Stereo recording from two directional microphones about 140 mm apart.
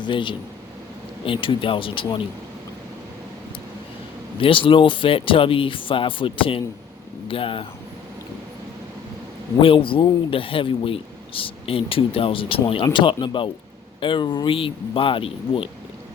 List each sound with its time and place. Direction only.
0.0 s speech: 35° left (ahead or behind)
4.4 s speech: 40° left (ahead or behind)
9.6 s speech: 40° left (ahead or behind)